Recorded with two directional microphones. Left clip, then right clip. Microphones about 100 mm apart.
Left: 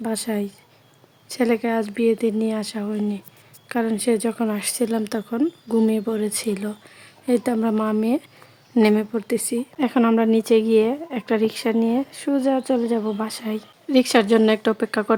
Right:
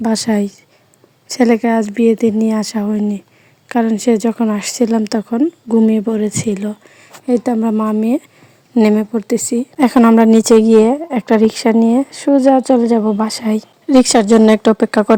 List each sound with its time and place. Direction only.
0.0 s a woman's voice: 55° right (ahead or behind); by 8.0 s 20° right (ahead or behind)
8.8 s a woman's voice: 35° right (ahead or behind)
13.0 s speech: 30° right (ahead or behind)
13.2 s a woman's voice: 45° right (ahead or behind)
13.8 s a woman's voice: 75° right (ahead or behind)